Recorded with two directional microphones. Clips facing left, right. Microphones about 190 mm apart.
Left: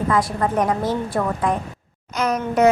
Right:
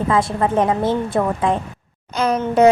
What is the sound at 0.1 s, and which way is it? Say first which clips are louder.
Speech: right 3 dB; 25° right (ahead or behind).